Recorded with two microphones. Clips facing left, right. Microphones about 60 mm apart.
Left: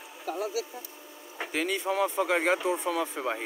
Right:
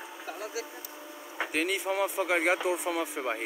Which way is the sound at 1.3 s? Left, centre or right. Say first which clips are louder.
Even; centre.